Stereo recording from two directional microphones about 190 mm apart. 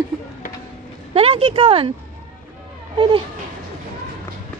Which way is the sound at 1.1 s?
30° right (ahead or behind).